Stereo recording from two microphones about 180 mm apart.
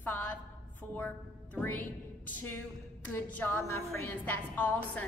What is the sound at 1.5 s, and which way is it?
A woman's voice, 10° left (ahead or behind).